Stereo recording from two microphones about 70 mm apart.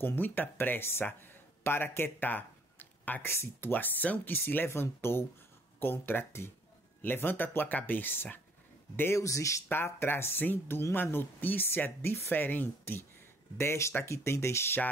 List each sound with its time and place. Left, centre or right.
0.0 s speech: left
9.2 s speech: left
9.7 s speech: left
13.6 s speech: left